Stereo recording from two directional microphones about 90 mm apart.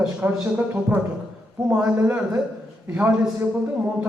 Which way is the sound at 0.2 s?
20° right (ahead or behind).